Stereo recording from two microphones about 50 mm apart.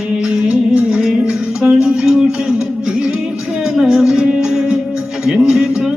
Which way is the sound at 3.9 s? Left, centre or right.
Centre.